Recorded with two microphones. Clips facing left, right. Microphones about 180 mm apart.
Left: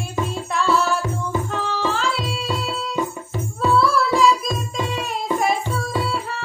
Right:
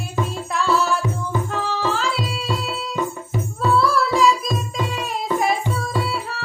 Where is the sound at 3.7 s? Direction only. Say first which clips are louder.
Even; centre (ahead or behind).